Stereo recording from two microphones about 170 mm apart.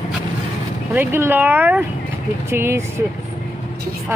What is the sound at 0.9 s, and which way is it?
Speech, 10° right (ahead or behind).